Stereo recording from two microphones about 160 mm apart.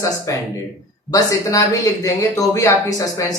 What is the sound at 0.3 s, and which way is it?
Speech, 20° left (ahead or behind).